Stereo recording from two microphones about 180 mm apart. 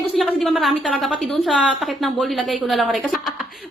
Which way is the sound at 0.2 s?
Centre (ahead or behind).